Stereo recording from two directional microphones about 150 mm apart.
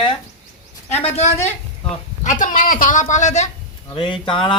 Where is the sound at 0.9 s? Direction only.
45° left (ahead or behind).